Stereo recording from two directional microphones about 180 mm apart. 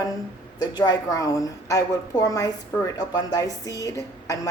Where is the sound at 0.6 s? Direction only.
25° left (ahead or behind).